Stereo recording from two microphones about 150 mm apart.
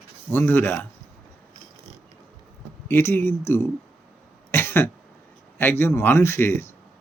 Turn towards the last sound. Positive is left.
turn(degrees=15)  # may be behind; listen again after turning